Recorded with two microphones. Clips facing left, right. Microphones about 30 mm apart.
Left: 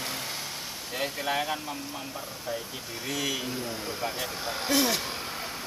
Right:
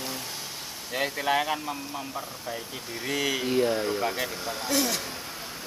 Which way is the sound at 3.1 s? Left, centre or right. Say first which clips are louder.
Right 4 dB; centre.